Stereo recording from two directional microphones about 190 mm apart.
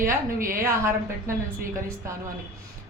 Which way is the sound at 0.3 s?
50° right (ahead or behind).